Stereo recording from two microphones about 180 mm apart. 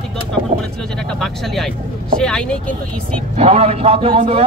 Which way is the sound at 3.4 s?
35° right (ahead or behind).